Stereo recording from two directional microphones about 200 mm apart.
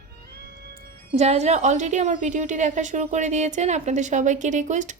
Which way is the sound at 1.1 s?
35° right (ahead or behind).